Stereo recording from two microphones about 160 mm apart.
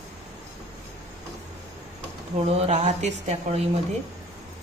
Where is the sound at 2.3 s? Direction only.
40° right (ahead or behind).